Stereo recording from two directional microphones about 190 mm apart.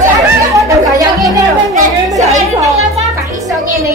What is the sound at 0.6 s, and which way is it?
Music, 15° right (ahead or behind).